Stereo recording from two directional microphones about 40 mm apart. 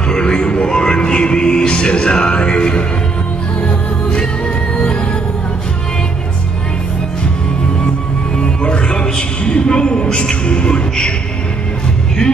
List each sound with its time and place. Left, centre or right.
0.1 s speech: left
3.6 s music: left
8.4 s music: left